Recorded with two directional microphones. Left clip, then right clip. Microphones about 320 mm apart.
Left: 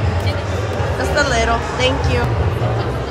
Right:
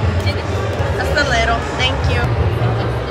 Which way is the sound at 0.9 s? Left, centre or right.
Centre.